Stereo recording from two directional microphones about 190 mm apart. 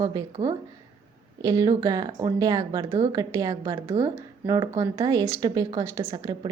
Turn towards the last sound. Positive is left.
turn(degrees=-25)  # may be behind; listen again after turning